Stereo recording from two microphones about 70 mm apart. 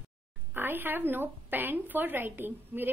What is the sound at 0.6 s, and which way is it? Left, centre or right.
A woman's voice, right.